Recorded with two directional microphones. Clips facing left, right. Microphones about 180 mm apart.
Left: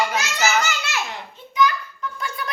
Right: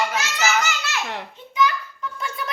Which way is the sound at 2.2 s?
25° right (ahead or behind).